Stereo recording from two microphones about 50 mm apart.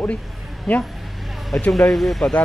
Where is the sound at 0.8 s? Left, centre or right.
Centre.